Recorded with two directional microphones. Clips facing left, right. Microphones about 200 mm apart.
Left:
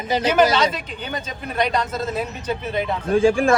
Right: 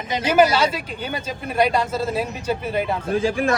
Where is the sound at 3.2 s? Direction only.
30° left (ahead or behind).